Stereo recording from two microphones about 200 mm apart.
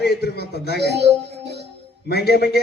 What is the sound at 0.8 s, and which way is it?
Speech, 60° right (ahead or behind).